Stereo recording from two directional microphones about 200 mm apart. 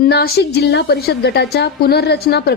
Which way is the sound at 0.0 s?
50° left (ahead or behind).